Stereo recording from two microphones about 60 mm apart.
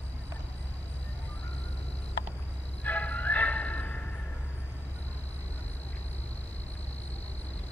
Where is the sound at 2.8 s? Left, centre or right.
Left.